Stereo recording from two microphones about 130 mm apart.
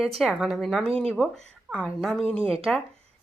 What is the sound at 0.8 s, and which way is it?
Speech, 50° right (ahead or behind).